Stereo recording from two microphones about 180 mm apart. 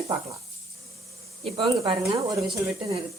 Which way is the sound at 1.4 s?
30° right (ahead or behind).